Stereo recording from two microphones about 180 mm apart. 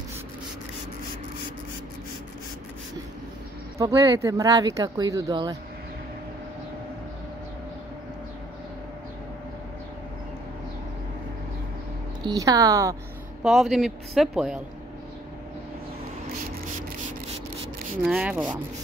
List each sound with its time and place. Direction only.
3.7 s speech: 15° right (ahead or behind)
12.3 s speech: 20° right (ahead or behind)
13.4 s a man's voice: centre (ahead or behind)
18.0 s speech: 5° right (ahead or behind)